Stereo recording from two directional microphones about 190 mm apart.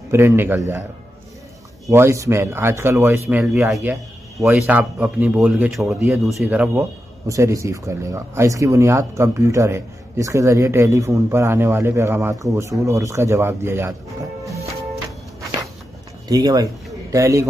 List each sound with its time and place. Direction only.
0.1 s a man's voice: 10° right (ahead or behind)
1.9 s a man's voice: 15° right (ahead or behind)
16.3 s a man's voice: 20° right (ahead or behind)